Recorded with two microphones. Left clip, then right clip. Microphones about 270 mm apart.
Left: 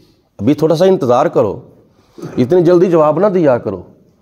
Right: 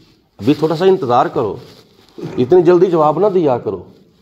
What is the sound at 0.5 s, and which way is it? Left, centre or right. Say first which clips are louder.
A man's voice: left 2 dB; left.